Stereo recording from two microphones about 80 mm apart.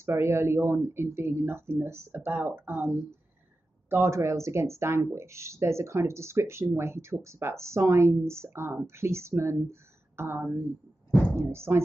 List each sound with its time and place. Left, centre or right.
0.0 s speech: right
3.9 s speech: right